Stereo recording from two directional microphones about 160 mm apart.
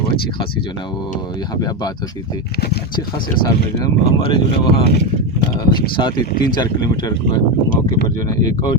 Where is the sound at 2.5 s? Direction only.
85° left.